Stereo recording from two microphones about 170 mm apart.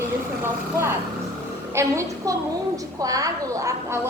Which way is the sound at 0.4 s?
15° right (ahead or behind).